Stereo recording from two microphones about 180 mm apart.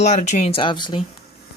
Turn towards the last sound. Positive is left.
turn(degrees=25)  # may be behind; listen again after turning